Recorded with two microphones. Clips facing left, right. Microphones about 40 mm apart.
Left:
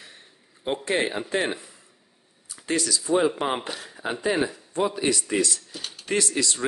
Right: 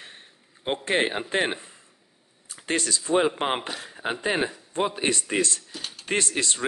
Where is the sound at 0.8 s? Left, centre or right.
Right.